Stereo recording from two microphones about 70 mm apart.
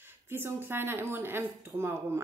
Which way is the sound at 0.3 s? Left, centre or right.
Right.